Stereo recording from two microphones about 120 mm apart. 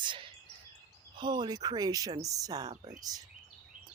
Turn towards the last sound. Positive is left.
turn(degrees=-30)  # may be behind; listen again after turning